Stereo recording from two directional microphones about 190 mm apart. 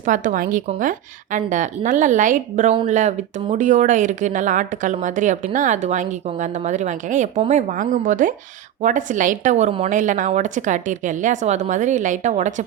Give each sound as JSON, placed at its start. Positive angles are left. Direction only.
{"t": 0.0, "sound": "speech", "side_deg": -40}